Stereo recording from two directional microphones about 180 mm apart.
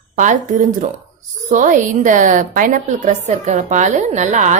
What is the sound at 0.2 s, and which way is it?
A woman's voice, 45° right (ahead or behind).